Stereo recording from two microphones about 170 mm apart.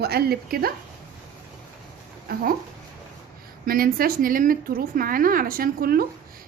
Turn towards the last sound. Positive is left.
turn(degrees=-60)  # may be behind; listen again after turning